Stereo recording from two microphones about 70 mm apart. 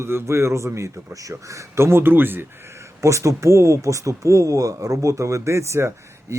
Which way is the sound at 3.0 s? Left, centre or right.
Right.